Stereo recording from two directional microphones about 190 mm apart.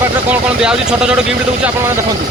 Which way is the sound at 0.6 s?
5° right (ahead or behind).